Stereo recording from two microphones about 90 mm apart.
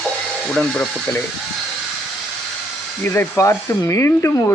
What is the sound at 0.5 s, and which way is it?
Speech, 5° left (ahead or behind).